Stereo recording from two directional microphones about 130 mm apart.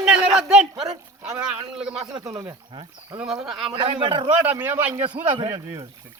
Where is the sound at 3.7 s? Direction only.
35° right (ahead or behind).